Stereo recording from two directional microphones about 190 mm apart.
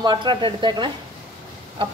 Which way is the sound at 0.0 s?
25° right (ahead or behind).